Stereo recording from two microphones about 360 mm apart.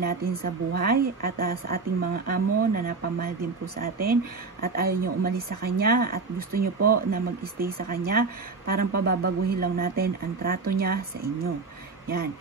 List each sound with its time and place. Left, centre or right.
0.1 s speech: right